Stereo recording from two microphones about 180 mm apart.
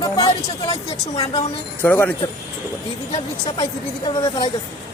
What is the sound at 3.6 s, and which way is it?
Speech, 25° left (ahead or behind).